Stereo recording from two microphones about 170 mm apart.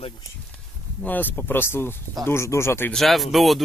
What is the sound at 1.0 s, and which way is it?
Speech, 10° left (ahead or behind).